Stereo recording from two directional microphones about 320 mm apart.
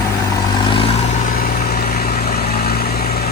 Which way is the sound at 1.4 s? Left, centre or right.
Left.